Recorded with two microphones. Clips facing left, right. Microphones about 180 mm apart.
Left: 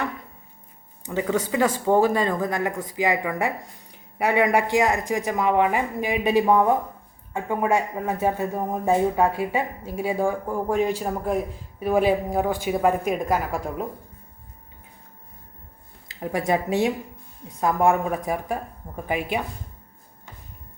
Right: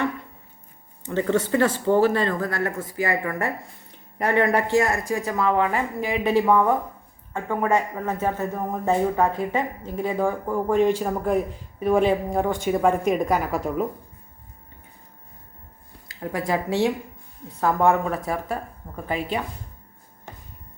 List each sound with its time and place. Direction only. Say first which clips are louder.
1.0 s speech: right 2 dB; 10° left (ahead or behind)
16.0 s speech: left 2 dB; 20° left (ahead or behind)